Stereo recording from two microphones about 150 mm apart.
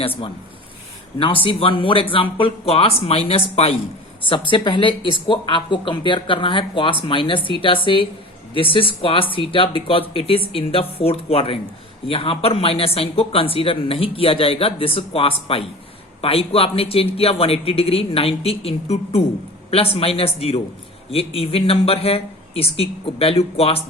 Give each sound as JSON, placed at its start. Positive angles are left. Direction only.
{"t": 0.0, "sound": "speech", "side_deg": 40}